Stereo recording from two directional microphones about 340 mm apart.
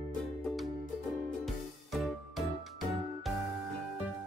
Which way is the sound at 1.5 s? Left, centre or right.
Centre.